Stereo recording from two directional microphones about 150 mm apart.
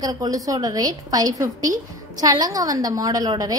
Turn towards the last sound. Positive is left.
turn(degrees=-25)  # may be behind; listen again after turning